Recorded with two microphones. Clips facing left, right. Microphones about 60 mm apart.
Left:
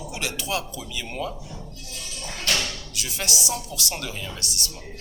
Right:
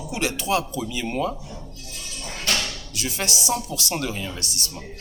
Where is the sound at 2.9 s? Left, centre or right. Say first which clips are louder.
Right 3 dB; right.